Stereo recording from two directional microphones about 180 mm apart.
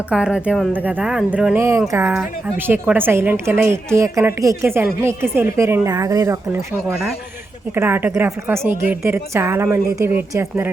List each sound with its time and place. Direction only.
0.1 s a woman's voice: 5° right (ahead or behind)
7.8 s a woman's voice: 10° right (ahead or behind)